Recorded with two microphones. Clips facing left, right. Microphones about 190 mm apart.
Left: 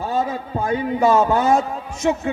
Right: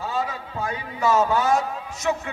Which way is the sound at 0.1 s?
55° left (ahead or behind).